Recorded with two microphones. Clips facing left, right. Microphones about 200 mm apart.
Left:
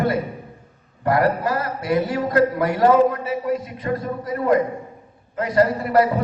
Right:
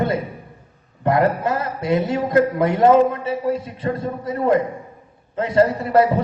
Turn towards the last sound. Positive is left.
turn(degrees=-25)  # may be behind; listen again after turning